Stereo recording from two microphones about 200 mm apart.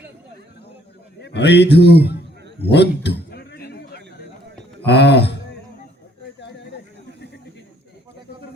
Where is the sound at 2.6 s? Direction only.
60° left (ahead or behind).